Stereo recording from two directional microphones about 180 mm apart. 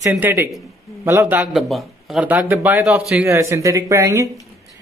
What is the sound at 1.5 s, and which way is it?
Speech, centre (ahead or behind).